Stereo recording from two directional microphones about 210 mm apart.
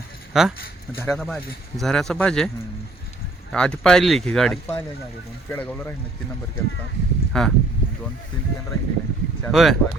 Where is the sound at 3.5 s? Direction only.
5° left (ahead or behind).